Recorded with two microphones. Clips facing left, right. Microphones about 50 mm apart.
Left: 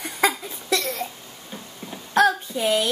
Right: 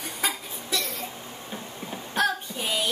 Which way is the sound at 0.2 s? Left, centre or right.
Left.